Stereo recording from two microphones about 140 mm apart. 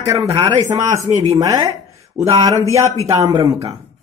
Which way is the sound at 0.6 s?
20° right (ahead or behind).